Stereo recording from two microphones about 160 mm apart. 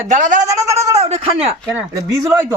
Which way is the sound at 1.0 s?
40° right (ahead or behind).